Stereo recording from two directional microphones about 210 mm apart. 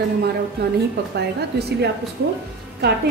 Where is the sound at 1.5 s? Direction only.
50° right (ahead or behind).